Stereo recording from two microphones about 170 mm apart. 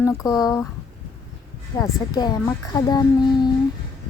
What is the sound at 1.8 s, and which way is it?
Speech, 25° left (ahead or behind).